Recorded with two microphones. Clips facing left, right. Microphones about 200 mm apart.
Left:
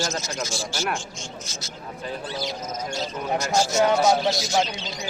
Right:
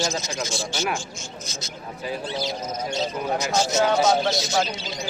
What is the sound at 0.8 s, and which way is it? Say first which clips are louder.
Speech: right 1 dB; centre (ahead or behind).